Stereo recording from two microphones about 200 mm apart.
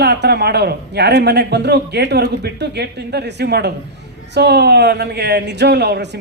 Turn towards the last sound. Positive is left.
turn(degrees=-55)  # may be behind; listen again after turning